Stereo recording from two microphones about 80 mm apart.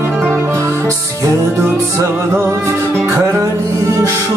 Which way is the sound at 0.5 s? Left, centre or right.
Right.